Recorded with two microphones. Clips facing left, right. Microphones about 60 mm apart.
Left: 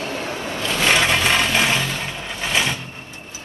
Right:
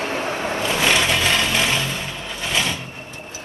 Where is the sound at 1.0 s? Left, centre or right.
Left.